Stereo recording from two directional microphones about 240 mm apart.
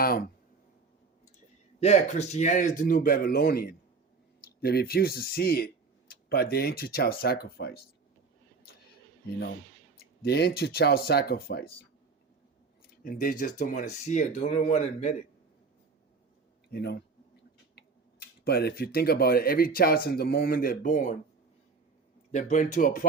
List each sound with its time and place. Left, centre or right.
0.0 s speech: left
1.8 s speech: left
8.7 s a sound: left
10.2 s speech: left
12.9 s a sound: left
13.4 s speech: left
16.7 s speech: left
22.3 s speech: left